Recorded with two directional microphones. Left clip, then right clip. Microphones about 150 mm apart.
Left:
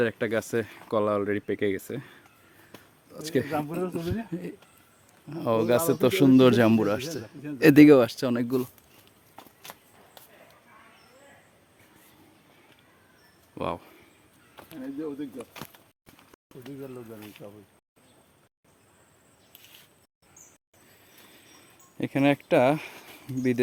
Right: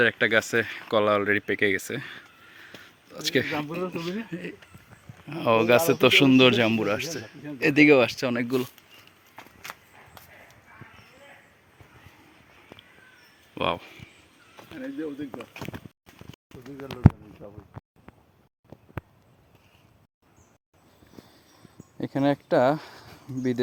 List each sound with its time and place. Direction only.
0.0 s speech: 20° left (ahead or behind)
3.7 s speech: 45° left (ahead or behind)
4.3 s speech: 30° left (ahead or behind)
5.3 s speech: 15° left (ahead or behind)
6.5 s speech: 50° left (ahead or behind)
6.8 s speech: 30° left (ahead or behind)
7.6 s speech: 90° left
7.9 s speech: 35° left (ahead or behind)
13.6 s speech: 15° left (ahead or behind)
17.4 s speech: 15° left (ahead or behind)
21.9 s speech: 15° left (ahead or behind)